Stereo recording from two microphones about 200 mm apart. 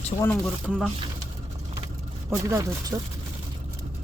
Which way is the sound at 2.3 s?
15° right (ahead or behind).